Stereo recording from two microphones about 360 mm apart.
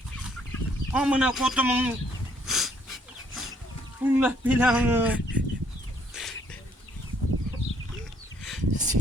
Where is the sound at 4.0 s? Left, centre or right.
Centre.